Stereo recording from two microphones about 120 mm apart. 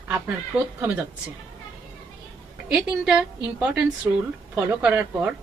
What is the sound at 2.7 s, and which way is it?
Speech, 10° right (ahead or behind).